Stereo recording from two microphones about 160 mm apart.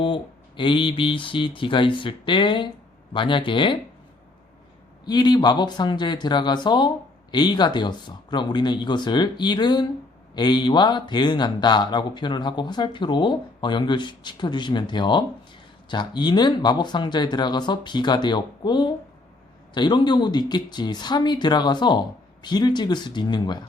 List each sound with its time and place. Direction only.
0.0 s speech: 30° left (ahead or behind)
5.0 s speech: 25° left (ahead or behind)